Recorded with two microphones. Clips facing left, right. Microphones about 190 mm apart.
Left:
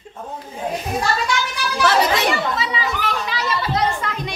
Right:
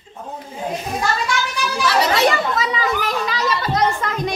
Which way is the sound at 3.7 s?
45° right (ahead or behind).